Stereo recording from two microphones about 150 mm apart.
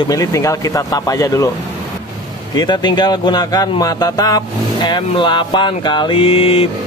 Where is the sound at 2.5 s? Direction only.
30° left (ahead or behind).